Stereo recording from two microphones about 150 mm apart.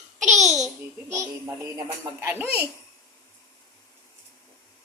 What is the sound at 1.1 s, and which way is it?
Music, 20° right (ahead or behind).